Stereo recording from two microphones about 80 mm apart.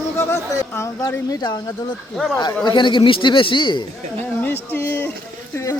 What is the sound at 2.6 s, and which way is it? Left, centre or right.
A man's voice, left.